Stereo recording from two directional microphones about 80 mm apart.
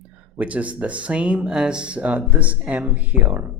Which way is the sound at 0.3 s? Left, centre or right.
Centre.